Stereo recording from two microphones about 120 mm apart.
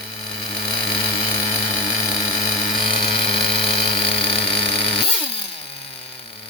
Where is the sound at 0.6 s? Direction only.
40° left (ahead or behind).